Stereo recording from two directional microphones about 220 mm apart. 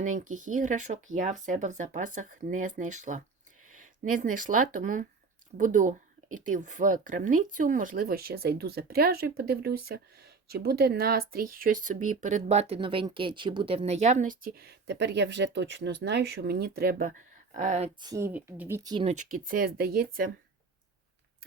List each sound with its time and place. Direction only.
0.3 s speech: 35° right (ahead or behind)
18.1 s speech: 10° right (ahead or behind); by 20.3 s 40° right (ahead or behind)